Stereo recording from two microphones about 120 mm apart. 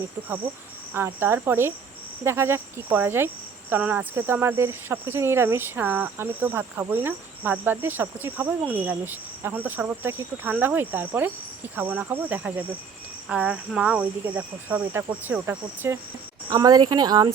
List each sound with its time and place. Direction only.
0.9 s cricket: 20° right (ahead or behind)
3.7 s speech: 15° right (ahead or behind)
16.5 s speech: 35° right (ahead or behind)